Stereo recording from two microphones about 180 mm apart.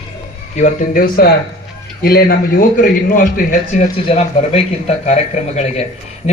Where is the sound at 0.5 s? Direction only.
40° left (ahead or behind).